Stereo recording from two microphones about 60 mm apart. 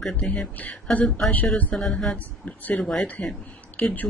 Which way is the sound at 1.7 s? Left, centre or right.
Centre.